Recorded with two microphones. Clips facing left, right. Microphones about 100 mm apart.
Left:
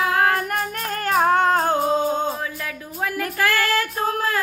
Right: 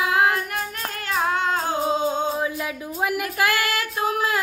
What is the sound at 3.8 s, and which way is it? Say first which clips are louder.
Female singing: left 1 dB; 40° left (ahead or behind).